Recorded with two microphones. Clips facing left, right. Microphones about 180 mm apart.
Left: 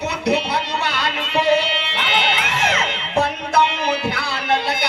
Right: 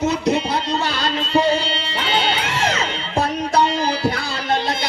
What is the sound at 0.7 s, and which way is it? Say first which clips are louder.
Music: right 2 dB; 35° right (ahead or behind).